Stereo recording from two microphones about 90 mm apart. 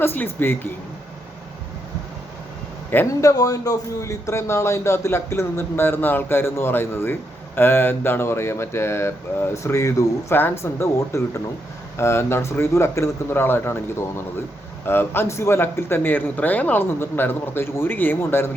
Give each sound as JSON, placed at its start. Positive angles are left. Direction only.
{"t": 0.0, "sound": "speech", "side_deg": 25}
{"t": 3.1, "sound": "speech", "side_deg": 40}